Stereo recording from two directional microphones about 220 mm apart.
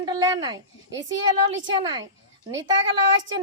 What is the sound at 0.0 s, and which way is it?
Babbling, 20° right (ahead or behind).